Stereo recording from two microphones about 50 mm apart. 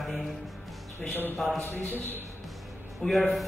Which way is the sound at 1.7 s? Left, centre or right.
Left.